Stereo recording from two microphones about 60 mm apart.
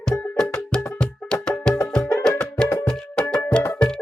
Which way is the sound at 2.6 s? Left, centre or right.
Centre.